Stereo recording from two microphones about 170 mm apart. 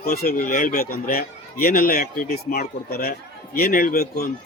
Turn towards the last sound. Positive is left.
turn(degrees=60)  # may be behind; listen again after turning